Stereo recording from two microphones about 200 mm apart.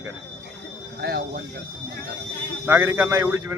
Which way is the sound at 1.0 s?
50° right (ahead or behind).